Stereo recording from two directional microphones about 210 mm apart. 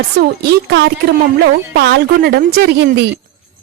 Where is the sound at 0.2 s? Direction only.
50° right (ahead or behind).